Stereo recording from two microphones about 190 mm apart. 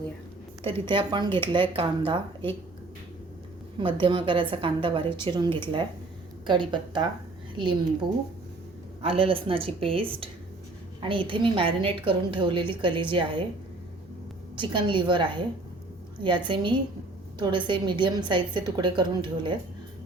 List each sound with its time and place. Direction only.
0.6 s a woman's voice: 30° right (ahead or behind)
3.8 s a woman's voice: 25° right (ahead or behind)
9.0 s a woman's voice: 30° right (ahead or behind)
14.5 s a woman's voice: 25° right (ahead or behind)
16.5 s a woman's voice: 25° right (ahead or behind)